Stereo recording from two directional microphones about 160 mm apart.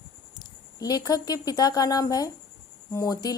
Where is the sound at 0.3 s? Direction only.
25° left (ahead or behind).